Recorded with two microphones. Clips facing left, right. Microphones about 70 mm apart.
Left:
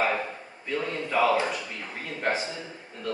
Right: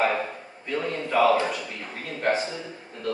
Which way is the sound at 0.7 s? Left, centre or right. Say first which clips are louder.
Right 2 dB; centre.